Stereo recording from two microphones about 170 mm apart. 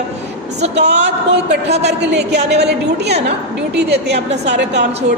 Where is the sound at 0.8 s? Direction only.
85° right.